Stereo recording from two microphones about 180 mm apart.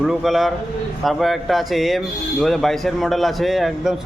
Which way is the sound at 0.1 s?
Centre (ahead or behind).